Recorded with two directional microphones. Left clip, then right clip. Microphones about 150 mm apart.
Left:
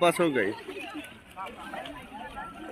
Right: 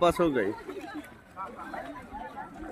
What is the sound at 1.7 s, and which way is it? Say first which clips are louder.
Chatter: even; 45° left (ahead or behind).